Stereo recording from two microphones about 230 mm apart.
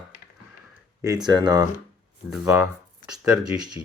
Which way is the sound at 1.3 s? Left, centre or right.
Centre.